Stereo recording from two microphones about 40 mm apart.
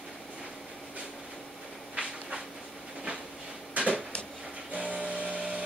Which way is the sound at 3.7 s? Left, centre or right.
Right.